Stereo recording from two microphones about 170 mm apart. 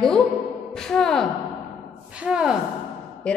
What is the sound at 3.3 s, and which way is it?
Speech, 5° left (ahead or behind).